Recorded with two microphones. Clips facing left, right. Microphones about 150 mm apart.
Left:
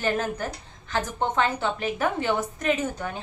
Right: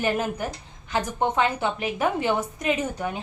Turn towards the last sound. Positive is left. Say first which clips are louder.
# even
turn(degrees=-10)  # may be behind; listen again after turning